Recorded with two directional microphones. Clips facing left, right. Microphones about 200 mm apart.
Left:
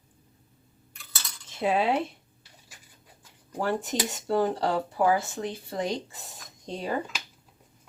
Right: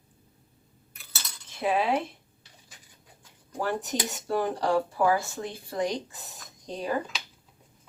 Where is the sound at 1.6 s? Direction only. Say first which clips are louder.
Left 1 dB; 25° left (ahead or behind).